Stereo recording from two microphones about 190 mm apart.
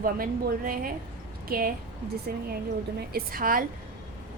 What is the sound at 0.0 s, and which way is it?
A woman's voice, 45° right (ahead or behind).